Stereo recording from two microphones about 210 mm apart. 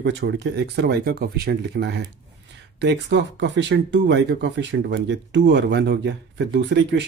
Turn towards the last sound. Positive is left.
turn(degrees=-55)  # may be behind; listen again after turning